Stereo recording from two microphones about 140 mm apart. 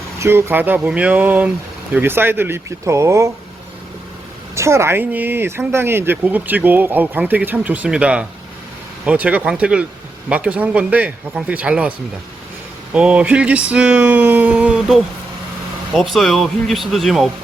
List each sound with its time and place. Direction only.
0.2 s speech: 20° right (ahead or behind)
4.5 s speech: 20° right (ahead or behind)
16.1 s speech: centre (ahead or behind)